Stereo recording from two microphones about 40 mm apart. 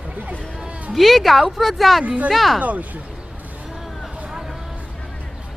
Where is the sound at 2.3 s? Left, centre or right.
Centre.